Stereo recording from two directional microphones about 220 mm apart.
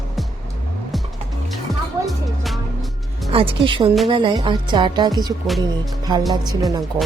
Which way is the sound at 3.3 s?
25° right (ahead or behind).